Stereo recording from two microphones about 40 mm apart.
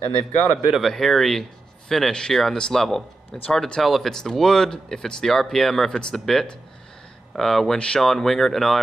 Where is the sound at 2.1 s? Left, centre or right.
Centre.